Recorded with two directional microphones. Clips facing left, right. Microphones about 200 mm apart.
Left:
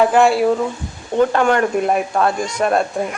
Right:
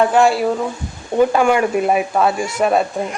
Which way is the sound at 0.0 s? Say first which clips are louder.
Left 1 dB; centre (ahead or behind).